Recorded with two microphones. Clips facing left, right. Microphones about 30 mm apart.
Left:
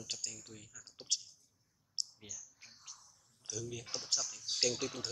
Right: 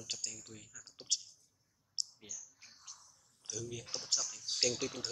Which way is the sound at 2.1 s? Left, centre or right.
Left.